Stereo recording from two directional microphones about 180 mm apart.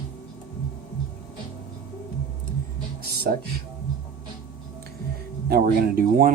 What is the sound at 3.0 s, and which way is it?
Music, 60° right (ahead or behind).